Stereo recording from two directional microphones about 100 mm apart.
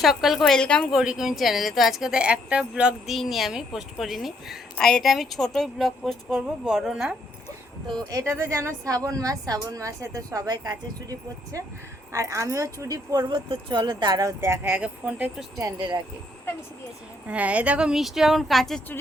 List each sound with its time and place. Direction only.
0.0 s a woman's voice: centre (ahead or behind)
0.9 s a woman's voice: 5° right (ahead or behind)
8.1 s a woman's voice: 25° right (ahead or behind); by 14.3 s 40° right (ahead or behind)
14.4 s speech: 25° right (ahead or behind)
17.2 s a woman's voice: 15° right (ahead or behind); by 18.8 s centre (ahead or behind)